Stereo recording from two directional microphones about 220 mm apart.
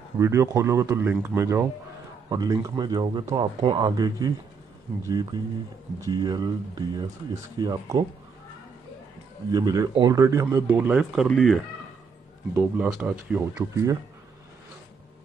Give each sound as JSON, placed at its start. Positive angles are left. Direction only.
{"t": 0.2, "sound": "speech", "side_deg": -15}
{"t": 9.5, "sound": "speech", "side_deg": -15}
{"t": 13.6, "sound": "speech", "side_deg": -15}